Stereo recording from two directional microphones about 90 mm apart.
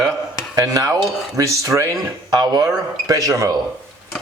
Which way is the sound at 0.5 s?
40° right (ahead or behind).